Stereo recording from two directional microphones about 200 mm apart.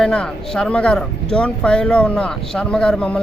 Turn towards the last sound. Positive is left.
turn(degrees=5)  # may be behind; listen again after turning